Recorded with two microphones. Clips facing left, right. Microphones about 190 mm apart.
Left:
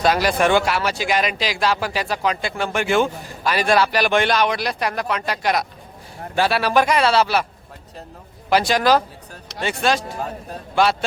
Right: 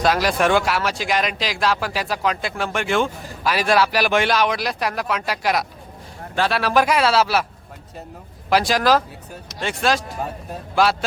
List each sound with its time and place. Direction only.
0.0 s speech: centre (ahead or behind)
8.4 s speech: centre (ahead or behind)